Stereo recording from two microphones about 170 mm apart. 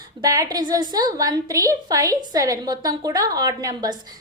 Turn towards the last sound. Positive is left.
turn(degrees=-20)  # may be behind; listen again after turning